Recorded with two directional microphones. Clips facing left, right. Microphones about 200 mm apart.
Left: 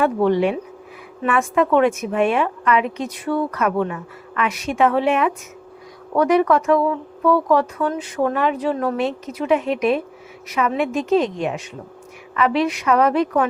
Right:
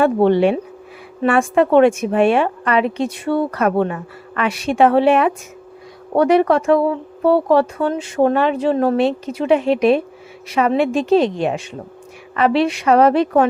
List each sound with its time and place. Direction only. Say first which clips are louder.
0.0 s a woman's voice: right 4 dB; 30° right (ahead or behind)